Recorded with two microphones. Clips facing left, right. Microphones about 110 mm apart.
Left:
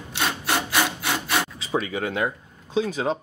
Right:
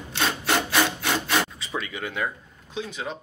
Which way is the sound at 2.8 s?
35° left (ahead or behind).